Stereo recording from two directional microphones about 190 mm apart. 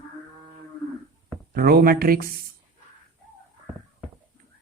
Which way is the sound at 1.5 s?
50° right (ahead or behind).